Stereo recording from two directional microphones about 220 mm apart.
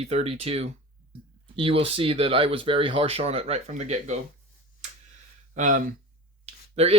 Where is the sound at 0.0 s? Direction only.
30° right (ahead or behind).